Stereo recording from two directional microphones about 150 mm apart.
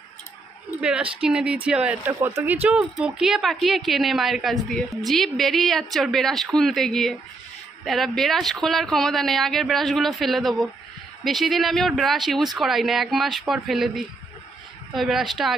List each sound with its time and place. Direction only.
0.7 s speech: 5° right (ahead or behind)